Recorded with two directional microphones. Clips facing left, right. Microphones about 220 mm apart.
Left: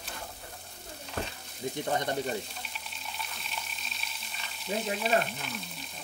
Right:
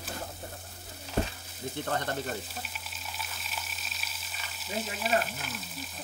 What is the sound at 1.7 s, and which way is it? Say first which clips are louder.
Speech: left 2 dB; 15° left (ahead or behind).